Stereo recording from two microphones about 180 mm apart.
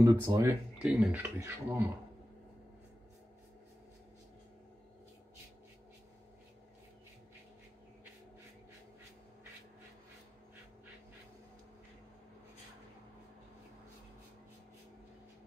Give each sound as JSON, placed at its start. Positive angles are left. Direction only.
{"t": 0.0, "sound": "speech", "side_deg": -20}
{"t": 0.8, "sound": "speech", "side_deg": -5}